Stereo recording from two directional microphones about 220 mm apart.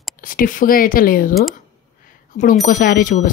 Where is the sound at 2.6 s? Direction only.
40° left (ahead or behind).